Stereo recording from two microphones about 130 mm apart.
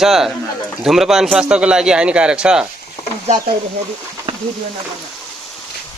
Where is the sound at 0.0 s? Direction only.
Centre (ahead or behind).